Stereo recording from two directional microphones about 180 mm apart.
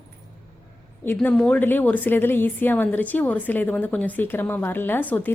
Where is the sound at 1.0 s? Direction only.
5° left (ahead or behind).